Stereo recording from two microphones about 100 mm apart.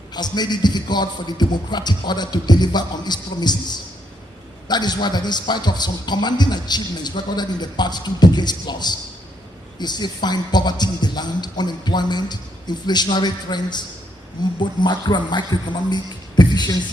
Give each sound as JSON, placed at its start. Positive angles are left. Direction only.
{"t": 0.1, "sound": "speech", "side_deg": 45}